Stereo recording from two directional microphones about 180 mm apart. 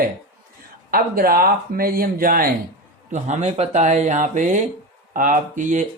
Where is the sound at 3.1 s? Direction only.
40° right (ahead or behind).